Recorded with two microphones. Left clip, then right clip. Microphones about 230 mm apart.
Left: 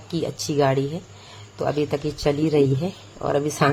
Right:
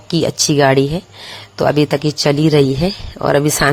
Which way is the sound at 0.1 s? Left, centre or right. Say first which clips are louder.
Right 11 dB; right.